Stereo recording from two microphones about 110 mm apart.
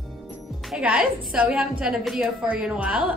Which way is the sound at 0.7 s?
10° right (ahead or behind).